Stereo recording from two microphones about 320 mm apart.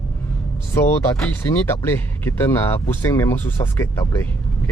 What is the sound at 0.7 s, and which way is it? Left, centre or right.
Speech, centre.